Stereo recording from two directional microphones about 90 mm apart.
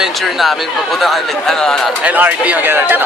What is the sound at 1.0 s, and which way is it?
Speech, 5° left (ahead or behind).